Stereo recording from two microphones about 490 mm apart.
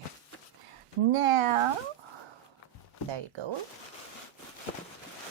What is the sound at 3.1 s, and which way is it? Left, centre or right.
Speech, right.